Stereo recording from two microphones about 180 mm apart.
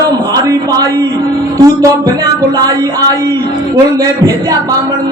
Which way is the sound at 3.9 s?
20° right (ahead or behind).